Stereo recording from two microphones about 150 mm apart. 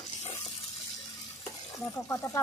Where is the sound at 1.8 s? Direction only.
15° left (ahead or behind).